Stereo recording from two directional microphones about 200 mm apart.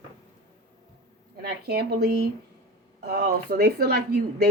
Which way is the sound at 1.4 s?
55° right (ahead or behind).